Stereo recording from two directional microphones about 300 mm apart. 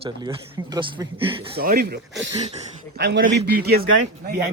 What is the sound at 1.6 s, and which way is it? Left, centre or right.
A man's voice, right.